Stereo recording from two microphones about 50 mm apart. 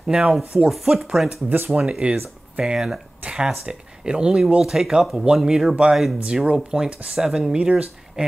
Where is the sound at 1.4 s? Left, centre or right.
Right.